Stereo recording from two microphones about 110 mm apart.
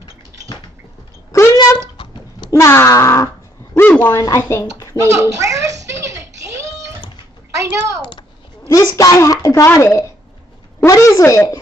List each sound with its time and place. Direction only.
1.3 s a sound: 25° left (ahead or behind)
2.5 s speech: 25° left (ahead or behind)
3.7 s speech: 15° left (ahead or behind)
4.2 s speech: 30° left (ahead or behind)
5.0 s speech: 25° right (ahead or behind)
5.9 s a sound: 25° right (ahead or behind)
7.5 s a woman's voice: 25° right (ahead or behind)
8.0 s a child's voice: 40° left (ahead or behind)
10.9 s a sound: 30° left (ahead or behind)